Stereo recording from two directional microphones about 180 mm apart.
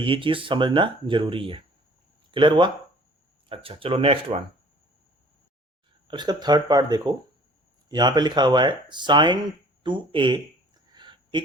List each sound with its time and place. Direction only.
0.0 s speech: 30° right (ahead or behind)
6.1 s speech: 25° right (ahead or behind)
10.9 s a sound: 25° right (ahead or behind)